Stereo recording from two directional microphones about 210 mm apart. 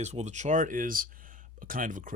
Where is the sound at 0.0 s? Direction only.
30° right (ahead or behind).